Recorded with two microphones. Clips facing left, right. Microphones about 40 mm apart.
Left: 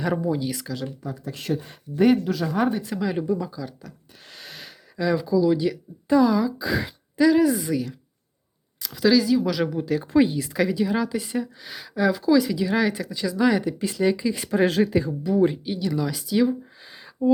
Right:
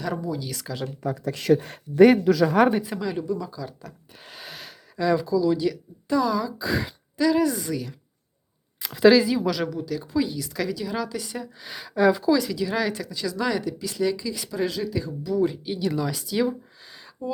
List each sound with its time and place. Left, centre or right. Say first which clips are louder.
0.0 s speech: left 5 dB; left
1.0 s speech: right 12 dB; right
3.2 s speech: left 3 dB; centre
8.8 s speech: right 3 dB; right
9.7 s speech: left 6 dB; left
10.5 s speech: left 5 dB; centre
11.6 s speech: right 5 dB; centre; by 14.3 s left
14.3 s speech: left 7 dB; left
14.9 s speech: left 4 dB; left
15.6 s speech: even; centre
16.8 s a sound: left 2 dB; centre